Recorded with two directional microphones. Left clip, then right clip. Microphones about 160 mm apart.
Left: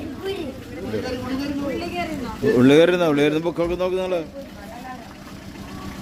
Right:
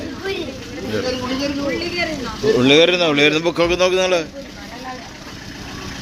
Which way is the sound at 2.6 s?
55° left (ahead or behind).